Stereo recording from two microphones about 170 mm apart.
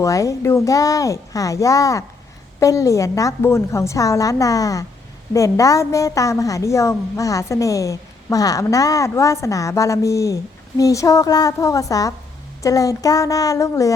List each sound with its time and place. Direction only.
0.0 s a woman's voice: 20° left (ahead or behind)